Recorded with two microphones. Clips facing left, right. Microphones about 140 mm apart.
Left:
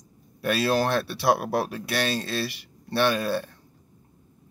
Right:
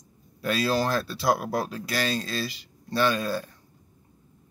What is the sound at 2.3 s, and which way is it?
Speech, 65° left (ahead or behind).